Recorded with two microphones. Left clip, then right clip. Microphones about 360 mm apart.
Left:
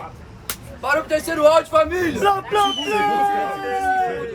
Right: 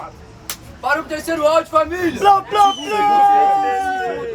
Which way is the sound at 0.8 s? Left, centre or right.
Centre.